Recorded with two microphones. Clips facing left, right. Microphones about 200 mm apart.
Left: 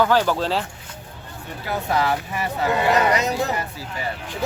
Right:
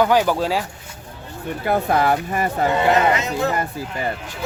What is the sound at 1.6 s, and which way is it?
Speech, 55° right (ahead or behind).